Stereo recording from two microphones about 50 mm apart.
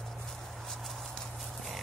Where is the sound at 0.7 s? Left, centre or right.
Centre.